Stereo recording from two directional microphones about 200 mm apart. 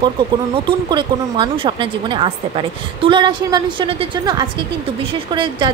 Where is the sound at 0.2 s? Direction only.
25° right (ahead or behind).